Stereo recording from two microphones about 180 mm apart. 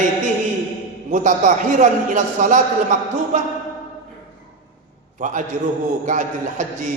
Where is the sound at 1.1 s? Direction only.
45° right (ahead or behind).